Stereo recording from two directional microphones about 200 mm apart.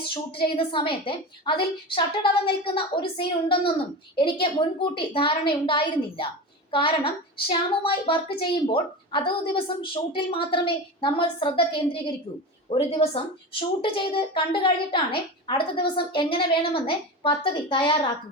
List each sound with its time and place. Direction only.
0.0 s a woman's voice: 25° left (ahead or behind)